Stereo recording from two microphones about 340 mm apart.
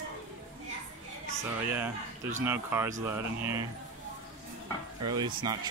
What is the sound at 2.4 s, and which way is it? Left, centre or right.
Speech, centre.